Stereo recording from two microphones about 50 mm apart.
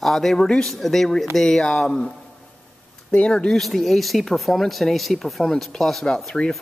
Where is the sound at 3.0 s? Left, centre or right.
Left.